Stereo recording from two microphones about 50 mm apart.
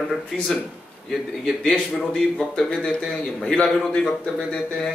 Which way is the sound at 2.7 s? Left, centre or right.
Centre.